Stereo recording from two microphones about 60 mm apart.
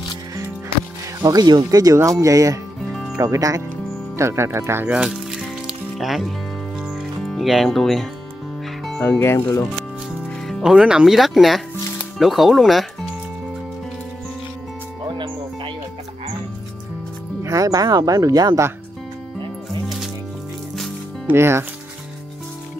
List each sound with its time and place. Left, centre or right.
1.2 s speech: right
2.1 s speech: right
2.8 s music: centre
3.2 s speech: right
4.2 s speech: right
5.1 s music: centre
5.9 s speech: centre
6.8 s music: centre
7.2 s speech: centre
9.2 s speech: left
10.6 s speech: centre
17.4 s speech: right
21.3 s speech: right